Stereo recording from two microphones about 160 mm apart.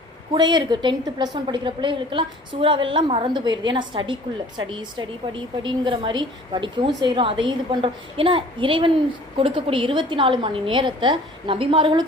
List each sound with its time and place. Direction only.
0.3 s a woman's voice: 25° right (ahead or behind)